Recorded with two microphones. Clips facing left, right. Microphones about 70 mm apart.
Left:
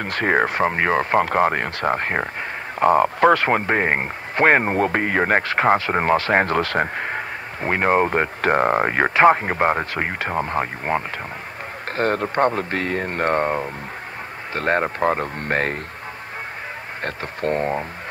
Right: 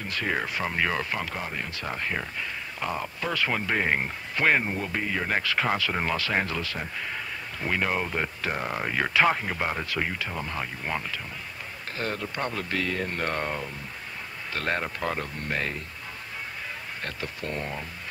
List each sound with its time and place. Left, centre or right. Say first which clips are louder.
0.0 s speech: left 10 dB; left
17.0 s speech: left 11 dB; left